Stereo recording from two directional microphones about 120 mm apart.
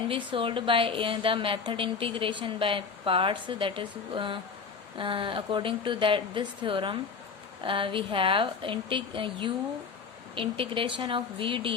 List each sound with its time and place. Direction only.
0.1 s a woman's voice: 45° right (ahead or behind)